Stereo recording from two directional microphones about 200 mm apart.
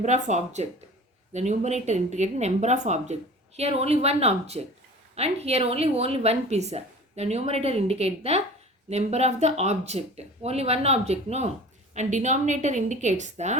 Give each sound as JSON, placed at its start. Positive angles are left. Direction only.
{"t": 0.0, "sound": "a woman's voice", "side_deg": -35}